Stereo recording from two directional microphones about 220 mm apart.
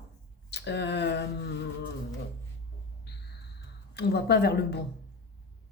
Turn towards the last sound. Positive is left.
turn(degrees=50)  # may be behind; listen again after turning